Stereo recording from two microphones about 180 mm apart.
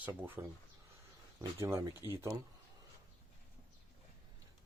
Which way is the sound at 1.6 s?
15° right (ahead or behind).